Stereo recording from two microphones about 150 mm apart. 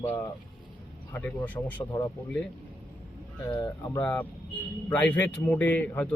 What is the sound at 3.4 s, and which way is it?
Speech, 25° left (ahead or behind).